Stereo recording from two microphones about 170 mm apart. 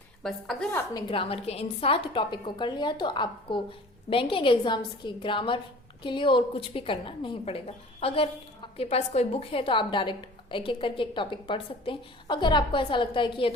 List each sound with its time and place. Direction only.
0.2 s a woman's voice: centre (ahead or behind)
0.7 s a woman's voice: 15° left (ahead or behind)
1.0 s a woman's voice: 30° left (ahead or behind)